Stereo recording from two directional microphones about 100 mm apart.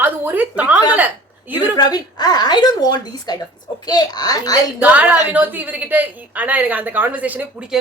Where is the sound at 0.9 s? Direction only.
15° right (ahead or behind).